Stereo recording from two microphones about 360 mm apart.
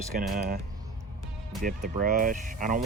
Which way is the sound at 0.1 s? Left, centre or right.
Right.